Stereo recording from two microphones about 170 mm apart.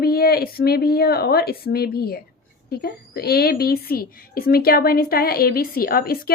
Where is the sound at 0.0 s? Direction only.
65° left (ahead or behind).